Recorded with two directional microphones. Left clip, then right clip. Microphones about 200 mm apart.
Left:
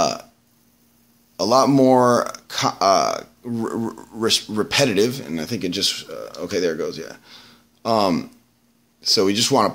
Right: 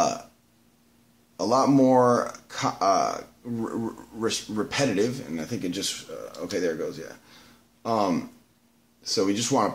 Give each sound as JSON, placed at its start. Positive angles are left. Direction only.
{"t": 1.3, "sound": "speech", "side_deg": 30}